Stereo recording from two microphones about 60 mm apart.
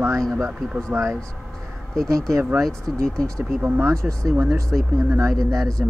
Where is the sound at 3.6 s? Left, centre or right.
Right.